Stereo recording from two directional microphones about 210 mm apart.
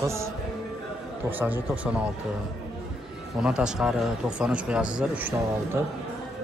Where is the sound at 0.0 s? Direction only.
15° right (ahead or behind).